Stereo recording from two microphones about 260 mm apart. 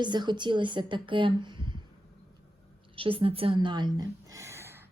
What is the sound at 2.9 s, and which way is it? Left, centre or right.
A woman's voice, right.